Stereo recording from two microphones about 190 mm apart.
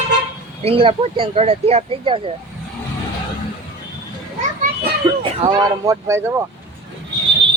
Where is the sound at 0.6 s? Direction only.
30° right (ahead or behind).